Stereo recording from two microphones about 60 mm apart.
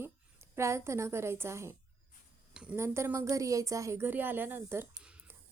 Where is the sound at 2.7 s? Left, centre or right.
Right.